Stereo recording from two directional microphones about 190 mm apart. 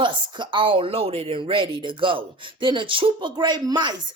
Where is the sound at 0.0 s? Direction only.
25° right (ahead or behind).